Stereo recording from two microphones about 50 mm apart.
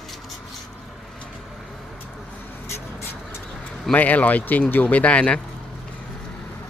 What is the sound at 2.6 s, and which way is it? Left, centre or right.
Vehicle, left.